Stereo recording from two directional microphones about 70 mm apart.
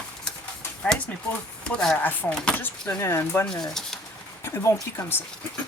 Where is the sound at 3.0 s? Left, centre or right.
Left.